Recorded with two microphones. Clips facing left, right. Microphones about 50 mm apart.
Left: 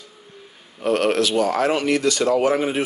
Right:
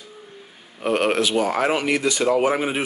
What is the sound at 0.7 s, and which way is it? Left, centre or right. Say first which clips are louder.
Speech: left 1 dB; centre.